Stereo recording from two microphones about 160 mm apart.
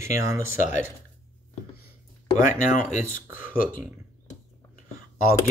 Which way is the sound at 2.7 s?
50° left (ahead or behind).